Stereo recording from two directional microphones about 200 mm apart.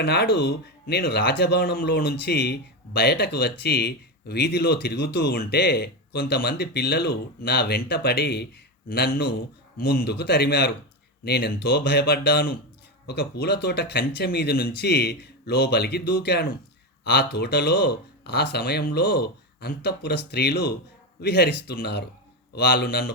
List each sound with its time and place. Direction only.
0.0 s speech: 55° left (ahead or behind)
9.7 s speech: 50° left (ahead or behind)